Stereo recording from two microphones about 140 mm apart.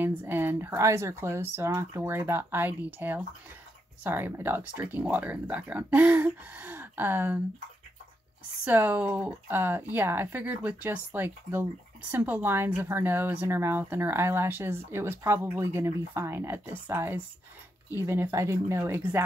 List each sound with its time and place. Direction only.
0.0 s speech: 15° right (ahead or behind)
8.6 s speech: 10° right (ahead or behind)